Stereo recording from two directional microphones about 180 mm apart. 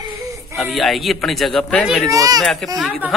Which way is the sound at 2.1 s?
20° right (ahead or behind).